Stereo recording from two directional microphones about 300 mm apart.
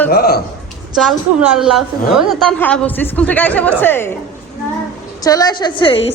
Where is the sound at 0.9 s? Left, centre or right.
Centre.